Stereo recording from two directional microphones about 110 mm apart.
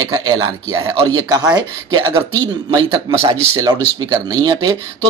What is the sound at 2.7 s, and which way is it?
Speech, 40° right (ahead or behind).